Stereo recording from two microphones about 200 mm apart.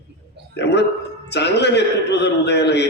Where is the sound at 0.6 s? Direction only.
60° left (ahead or behind).